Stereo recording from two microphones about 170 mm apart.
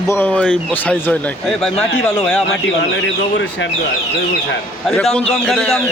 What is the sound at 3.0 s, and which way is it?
Speech, 90° left.